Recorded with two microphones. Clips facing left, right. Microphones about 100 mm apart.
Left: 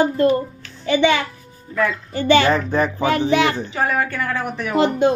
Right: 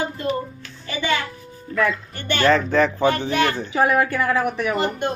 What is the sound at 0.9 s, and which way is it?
Speech, 80° left.